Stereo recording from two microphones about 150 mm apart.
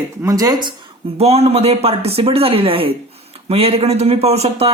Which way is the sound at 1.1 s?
45° right (ahead or behind).